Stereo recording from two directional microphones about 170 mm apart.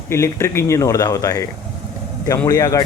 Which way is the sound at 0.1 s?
15° left (ahead or behind).